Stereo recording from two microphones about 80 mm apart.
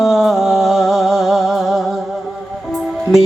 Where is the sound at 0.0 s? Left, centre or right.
Centre.